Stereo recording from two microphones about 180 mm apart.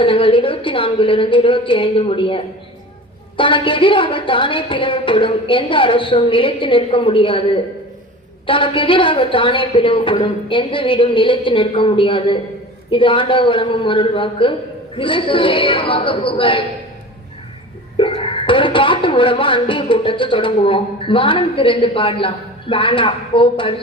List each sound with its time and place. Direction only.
0.0 s speech: 30° left (ahead or behind)
17.9 s speech: 30° left (ahead or behind)